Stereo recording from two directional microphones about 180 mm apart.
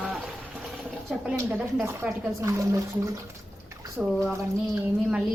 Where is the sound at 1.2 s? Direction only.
5° right (ahead or behind).